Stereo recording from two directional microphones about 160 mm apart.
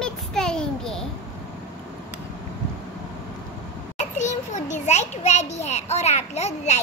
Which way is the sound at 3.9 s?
50° left (ahead or behind).